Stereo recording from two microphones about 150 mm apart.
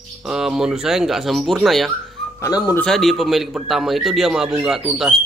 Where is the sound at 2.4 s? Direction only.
20° left (ahead or behind).